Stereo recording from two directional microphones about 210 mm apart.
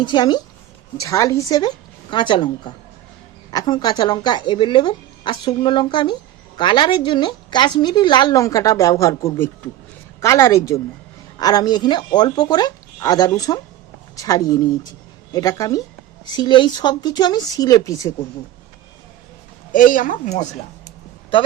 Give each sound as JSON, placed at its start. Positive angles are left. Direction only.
{"t": 0.0, "sound": "a woman's voice", "side_deg": 20}
{"t": 19.7, "sound": "speech", "side_deg": 40}